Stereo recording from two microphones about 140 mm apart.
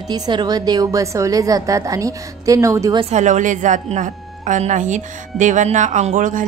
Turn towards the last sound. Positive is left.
turn(degrees=-65)  # may be behind; listen again after turning